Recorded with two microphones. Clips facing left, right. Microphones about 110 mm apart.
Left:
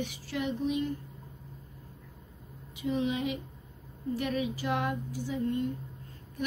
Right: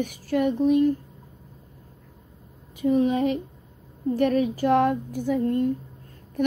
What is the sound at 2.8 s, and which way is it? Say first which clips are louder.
A woman's voice: right 9 dB; 45° right (ahead or behind).